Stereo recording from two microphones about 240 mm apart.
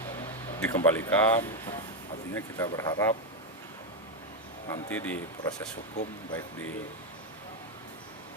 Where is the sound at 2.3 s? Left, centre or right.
Centre.